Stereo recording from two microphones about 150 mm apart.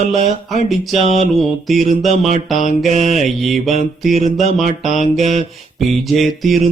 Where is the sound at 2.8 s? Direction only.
50° right (ahead or behind).